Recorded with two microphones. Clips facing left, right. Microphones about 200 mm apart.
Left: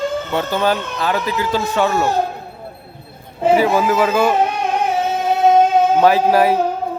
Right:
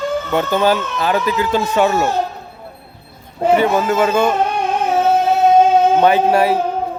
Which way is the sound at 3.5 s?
5° left (ahead or behind).